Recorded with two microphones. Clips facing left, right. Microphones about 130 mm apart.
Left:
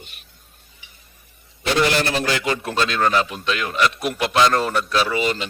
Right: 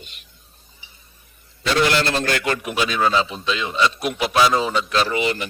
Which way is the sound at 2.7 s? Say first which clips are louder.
Left 1 dB; 10° right (ahead or behind).